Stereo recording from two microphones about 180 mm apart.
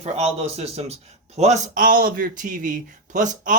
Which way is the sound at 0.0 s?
35° right (ahead or behind).